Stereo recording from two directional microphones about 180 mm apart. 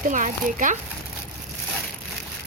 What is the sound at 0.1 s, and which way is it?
Speech, 45° right (ahead or behind).